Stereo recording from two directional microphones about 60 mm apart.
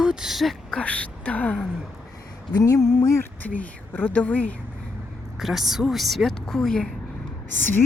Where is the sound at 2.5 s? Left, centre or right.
Left.